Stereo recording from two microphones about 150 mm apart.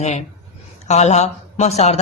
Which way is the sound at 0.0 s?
50° left (ahead or behind).